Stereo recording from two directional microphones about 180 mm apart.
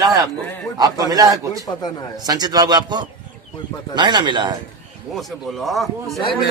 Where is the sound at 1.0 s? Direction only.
20° right (ahead or behind).